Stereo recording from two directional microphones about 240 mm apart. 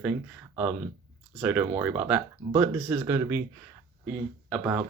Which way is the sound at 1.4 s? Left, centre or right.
Centre.